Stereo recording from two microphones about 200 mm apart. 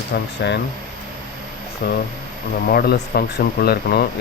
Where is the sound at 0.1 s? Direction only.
55° left (ahead or behind).